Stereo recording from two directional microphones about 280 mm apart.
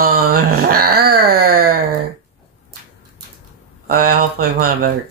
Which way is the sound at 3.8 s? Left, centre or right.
Right.